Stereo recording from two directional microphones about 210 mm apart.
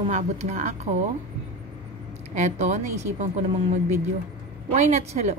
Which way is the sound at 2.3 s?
35° right (ahead or behind).